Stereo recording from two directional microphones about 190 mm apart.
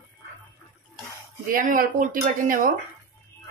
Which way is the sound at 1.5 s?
45° right (ahead or behind).